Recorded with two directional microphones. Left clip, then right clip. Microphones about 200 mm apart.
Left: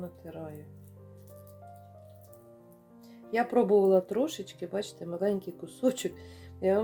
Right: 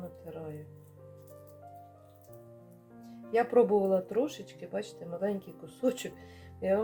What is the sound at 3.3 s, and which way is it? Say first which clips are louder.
Speech: even; 30° left (ahead or behind).